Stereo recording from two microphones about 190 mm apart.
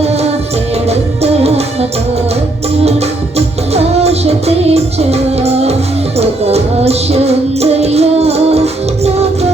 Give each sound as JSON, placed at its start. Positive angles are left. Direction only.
{"t": 0.9, "sound": "music", "side_deg": -35}
{"t": 3.3, "sound": "music", "side_deg": -35}